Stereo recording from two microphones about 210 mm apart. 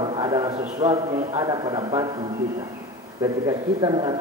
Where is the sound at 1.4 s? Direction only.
20° right (ahead or behind).